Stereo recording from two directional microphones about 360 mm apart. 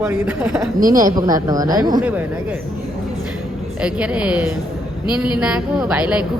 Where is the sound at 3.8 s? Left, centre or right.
Centre.